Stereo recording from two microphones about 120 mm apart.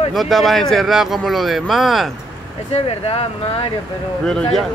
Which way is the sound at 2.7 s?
55° left (ahead or behind).